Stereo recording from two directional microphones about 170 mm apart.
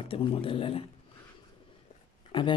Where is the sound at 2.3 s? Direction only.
30° left (ahead or behind).